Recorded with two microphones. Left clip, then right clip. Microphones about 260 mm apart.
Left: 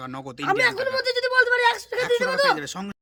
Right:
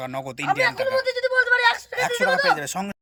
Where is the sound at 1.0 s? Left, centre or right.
Centre.